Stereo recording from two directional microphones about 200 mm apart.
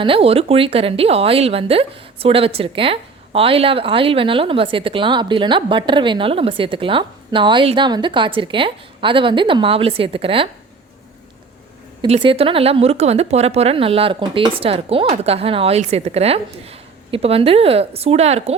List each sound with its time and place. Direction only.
0.0 s speech: 30° right (ahead or behind)
12.0 s speech: 30° right (ahead or behind)